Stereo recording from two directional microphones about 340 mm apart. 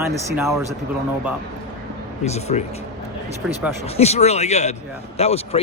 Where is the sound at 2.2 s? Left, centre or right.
Centre.